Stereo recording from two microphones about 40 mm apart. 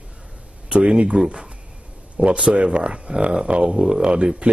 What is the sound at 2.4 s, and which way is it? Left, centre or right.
A man's voice, right.